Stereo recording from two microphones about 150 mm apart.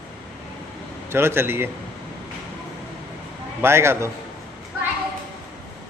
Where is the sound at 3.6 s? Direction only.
15° right (ahead or behind).